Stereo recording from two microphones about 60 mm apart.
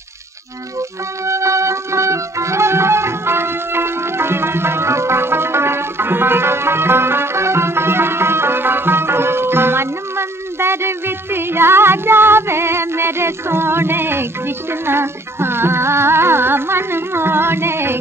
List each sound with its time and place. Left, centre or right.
1.2 s music: right